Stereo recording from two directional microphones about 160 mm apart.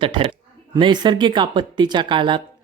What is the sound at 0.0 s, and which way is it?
Speech, 30° right (ahead or behind).